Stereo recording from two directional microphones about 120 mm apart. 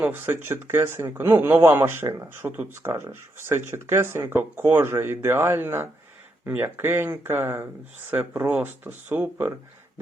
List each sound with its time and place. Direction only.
0.0 s speech: 20° right (ahead or behind)